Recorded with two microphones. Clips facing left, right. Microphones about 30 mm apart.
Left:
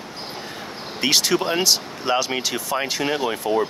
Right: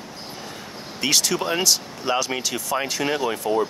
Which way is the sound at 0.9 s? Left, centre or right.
Centre.